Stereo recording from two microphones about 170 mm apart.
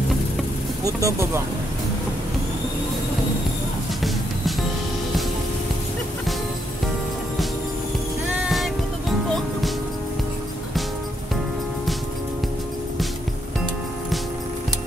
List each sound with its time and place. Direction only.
0.8 s speech: 15° right (ahead or behind)
8.4 s music: centre (ahead or behind)